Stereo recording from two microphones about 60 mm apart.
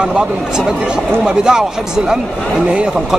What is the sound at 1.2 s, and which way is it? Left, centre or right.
Speech, centre.